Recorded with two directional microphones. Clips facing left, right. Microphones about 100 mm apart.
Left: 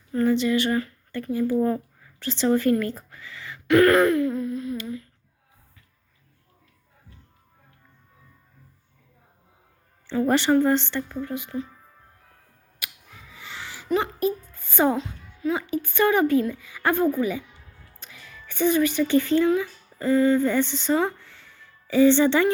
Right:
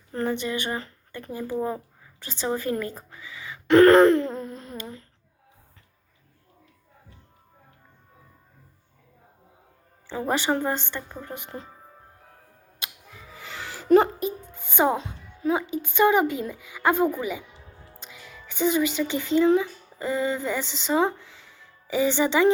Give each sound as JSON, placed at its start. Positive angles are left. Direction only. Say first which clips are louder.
{"t": 0.1, "sound": "speech", "louder": "left 6 dB", "side_deg": -30}
{"t": 3.1, "sound": "a sound", "louder": "even", "side_deg": -10}
{"t": 3.7, "sound": "wail", "louder": "right 3 dB", "side_deg": -30}
{"t": 10.2, "sound": "speech", "louder": "left 5 dB", "side_deg": -10}
{"t": 11.2, "sound": "speech", "louder": "left 7 dB", "side_deg": -30}
{"t": 12.8, "sound": "a sound", "louder": "right 1 dB", "side_deg": -25}
{"t": 13.3, "sound": "a sound", "louder": "right 2 dB", "side_deg": -45}
{"t": 13.8, "sound": "speech", "louder": "right 7 dB", "side_deg": -45}
{"t": 14.2, "sound": "music", "louder": "left 5 dB", "side_deg": -20}
{"t": 14.9, "sound": "speech", "louder": "left 2 dB", "side_deg": -30}
{"t": 17.5, "sound": "a sound", "louder": "right 4 dB", "side_deg": -30}
{"t": 19.5, "sound": "speech", "louder": "right 2 dB", "side_deg": -20}